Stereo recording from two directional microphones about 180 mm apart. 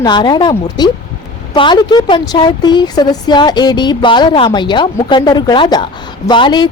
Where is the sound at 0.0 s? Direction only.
25° left (ahead or behind).